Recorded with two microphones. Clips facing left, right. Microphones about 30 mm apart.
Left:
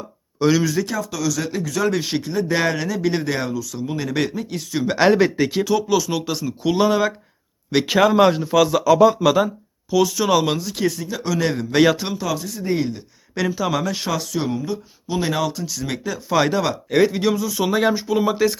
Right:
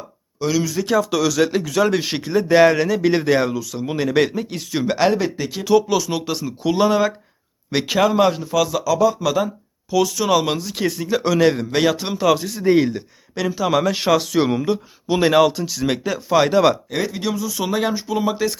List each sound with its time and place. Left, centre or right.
0.3 s speech: centre
1.1 s speech: right
1.6 s speech: right
5.1 s speech: centre
5.6 s speech: centre
8.8 s speech: left
9.2 s speech: centre
10.9 s speech: right
11.7 s speech: centre
12.1 s speech: right
13.6 s speech: centre
14.2 s speech: right
16.3 s speech: centre
16.9 s speech: centre